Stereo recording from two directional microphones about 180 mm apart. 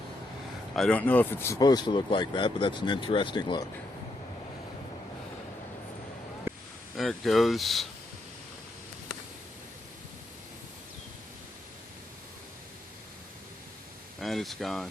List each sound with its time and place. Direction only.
0.8 s speech: 5° left (ahead or behind); by 3.7 s 25° left (ahead or behind)
6.9 s speech: centre (ahead or behind)
14.2 s speech: centre (ahead or behind)